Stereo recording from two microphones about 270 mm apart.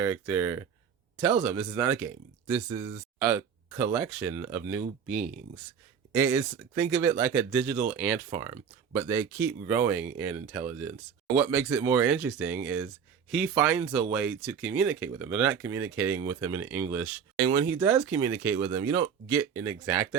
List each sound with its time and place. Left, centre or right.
0.0 s speech: centre
5.0 s speech: right
6.1 s speech: centre